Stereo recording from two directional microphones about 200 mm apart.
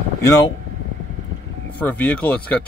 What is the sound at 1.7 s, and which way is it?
Speech, 10° left (ahead or behind).